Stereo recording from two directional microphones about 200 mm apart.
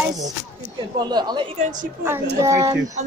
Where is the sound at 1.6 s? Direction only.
40° right (ahead or behind).